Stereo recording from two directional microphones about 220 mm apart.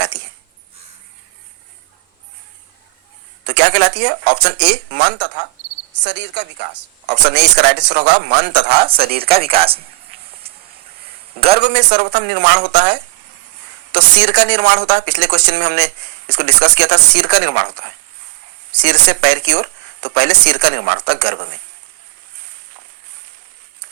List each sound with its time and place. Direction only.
3.5 s speech: 50° right (ahead or behind)
8.9 s speech: 25° right (ahead or behind)
11.0 s a sound: 25° right (ahead or behind)
11.6 s speech: 50° right (ahead or behind)
18.8 s speech: 50° right (ahead or behind)